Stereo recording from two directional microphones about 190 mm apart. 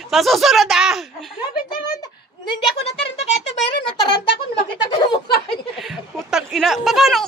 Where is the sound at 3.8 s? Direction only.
25° left (ahead or behind).